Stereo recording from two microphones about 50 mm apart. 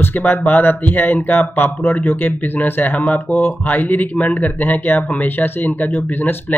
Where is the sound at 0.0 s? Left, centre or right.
Left.